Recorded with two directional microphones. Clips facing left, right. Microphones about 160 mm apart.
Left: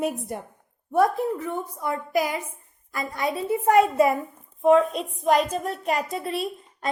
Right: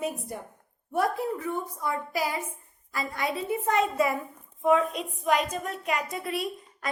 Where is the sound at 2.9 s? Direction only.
25° left (ahead or behind).